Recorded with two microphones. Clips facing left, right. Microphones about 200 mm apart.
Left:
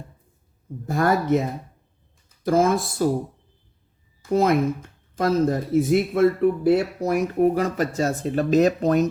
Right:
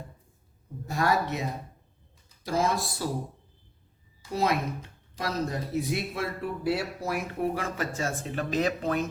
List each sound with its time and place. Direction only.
0.9 s speech: 50° left (ahead or behind)
4.2 s speech: 50° left (ahead or behind)